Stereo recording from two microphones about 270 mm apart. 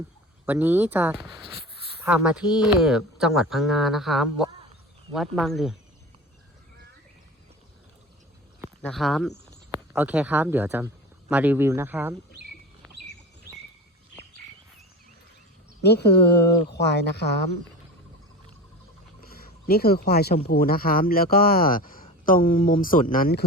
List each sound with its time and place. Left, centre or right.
0.4 s speech: centre
8.8 s speech: centre
15.8 s speech: left
19.2 s a sound: left
20.4 s speech: left